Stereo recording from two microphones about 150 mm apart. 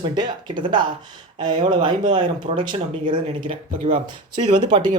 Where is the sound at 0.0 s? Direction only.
30° right (ahead or behind).